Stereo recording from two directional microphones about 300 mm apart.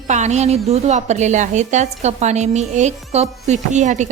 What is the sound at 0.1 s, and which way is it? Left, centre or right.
A woman's voice, right.